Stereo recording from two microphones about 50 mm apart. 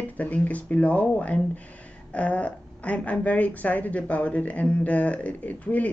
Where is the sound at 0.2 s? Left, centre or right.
Left.